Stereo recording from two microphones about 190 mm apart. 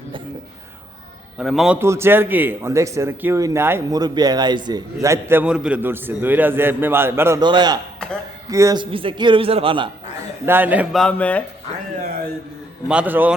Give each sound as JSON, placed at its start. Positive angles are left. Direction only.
{"t": 1.4, "sound": "a man's voice", "side_deg": -5}
{"t": 7.9, "sound": "a sound", "side_deg": 5}
{"t": 8.4, "sound": "a man's voice", "side_deg": -15}
{"t": 10.4, "sound": "a man's voice", "side_deg": -10}
{"t": 11.0, "sound": "speech", "side_deg": 10}
{"t": 12.9, "sound": "a man's voice", "side_deg": -10}